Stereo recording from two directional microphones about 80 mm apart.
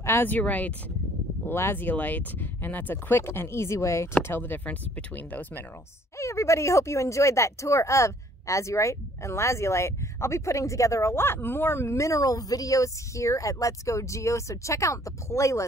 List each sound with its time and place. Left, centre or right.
0.0 s speech: left
1.5 s speech: left
6.1 s speech: left